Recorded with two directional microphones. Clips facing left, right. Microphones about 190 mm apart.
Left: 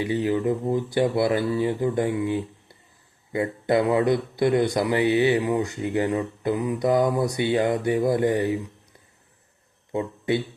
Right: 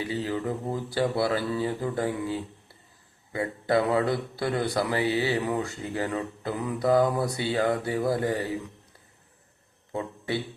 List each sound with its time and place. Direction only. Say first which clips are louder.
0.0 s speech: left 6 dB; 20° left (ahead or behind)
9.9 s speech: left 6 dB; 20° left (ahead or behind)